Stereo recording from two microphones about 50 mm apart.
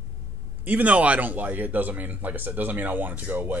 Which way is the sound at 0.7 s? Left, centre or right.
Right.